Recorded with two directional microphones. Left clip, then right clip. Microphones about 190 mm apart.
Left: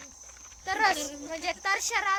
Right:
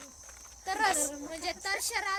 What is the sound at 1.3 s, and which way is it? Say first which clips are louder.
Speech: left 7 dB; 25° left (ahead or behind).